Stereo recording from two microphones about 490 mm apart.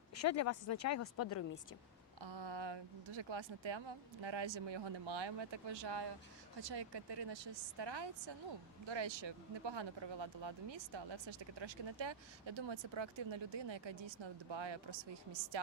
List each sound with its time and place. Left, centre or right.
0.2 s speech: left
2.2 s speech: right